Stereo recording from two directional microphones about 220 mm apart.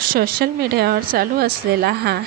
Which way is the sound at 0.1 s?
40° right (ahead or behind).